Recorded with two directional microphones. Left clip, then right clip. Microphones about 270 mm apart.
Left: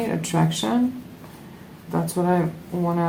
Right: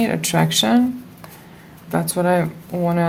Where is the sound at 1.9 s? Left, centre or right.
Right.